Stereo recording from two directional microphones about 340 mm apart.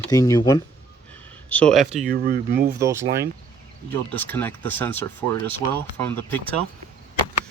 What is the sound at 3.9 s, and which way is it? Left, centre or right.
Speech, centre.